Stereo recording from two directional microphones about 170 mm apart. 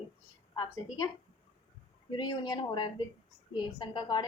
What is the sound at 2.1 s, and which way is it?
A woman's voice, 25° left (ahead or behind).